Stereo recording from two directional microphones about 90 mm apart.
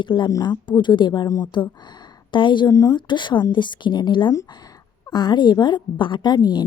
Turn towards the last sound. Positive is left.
turn(degrees=50)  # may be behind; listen again after turning